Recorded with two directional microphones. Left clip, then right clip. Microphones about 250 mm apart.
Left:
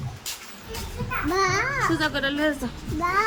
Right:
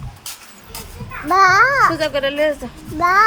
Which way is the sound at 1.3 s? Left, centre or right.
Centre.